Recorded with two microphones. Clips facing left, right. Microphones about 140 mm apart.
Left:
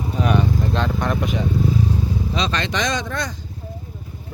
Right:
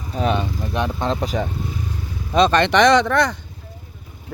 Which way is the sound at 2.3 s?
50° right (ahead or behind).